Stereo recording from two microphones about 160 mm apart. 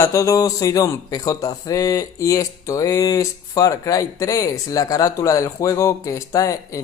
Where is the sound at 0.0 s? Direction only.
20° left (ahead or behind).